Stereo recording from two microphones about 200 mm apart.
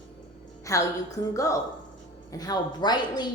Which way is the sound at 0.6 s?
15° left (ahead or behind).